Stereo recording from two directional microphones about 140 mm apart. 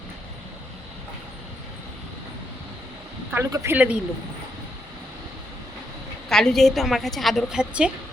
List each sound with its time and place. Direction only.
3.3 s speech: 20° right (ahead or behind)
6.2 s a woman's voice: 5° left (ahead or behind)